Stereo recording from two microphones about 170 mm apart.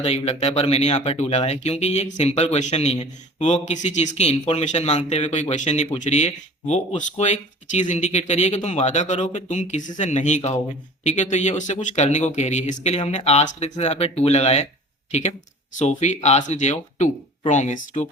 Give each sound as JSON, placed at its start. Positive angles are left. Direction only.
{"t": 0.0, "sound": "a man's voice", "side_deg": 40}